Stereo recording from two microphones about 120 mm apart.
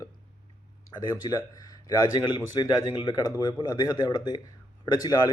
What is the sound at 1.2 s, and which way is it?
Speech, 30° left (ahead or behind).